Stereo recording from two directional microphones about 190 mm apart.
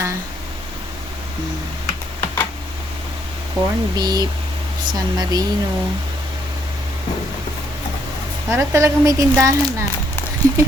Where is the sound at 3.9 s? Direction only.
20° right (ahead or behind).